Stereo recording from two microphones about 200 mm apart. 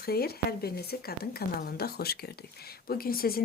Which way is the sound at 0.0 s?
50° left (ahead or behind).